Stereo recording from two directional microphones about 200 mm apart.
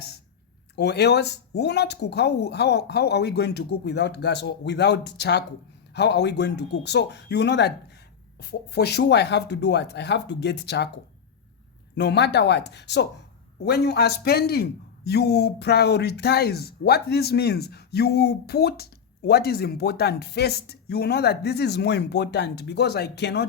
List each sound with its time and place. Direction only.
0.8 s a man's voice: 55° left (ahead or behind)